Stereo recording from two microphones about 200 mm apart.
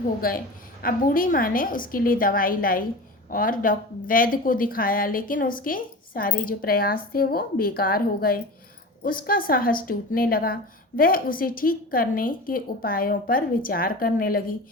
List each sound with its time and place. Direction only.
0.2 s a woman's voice: 45° left (ahead or behind)